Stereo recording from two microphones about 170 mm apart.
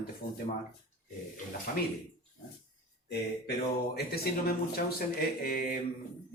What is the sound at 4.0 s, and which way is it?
Speech, 65° left (ahead or behind).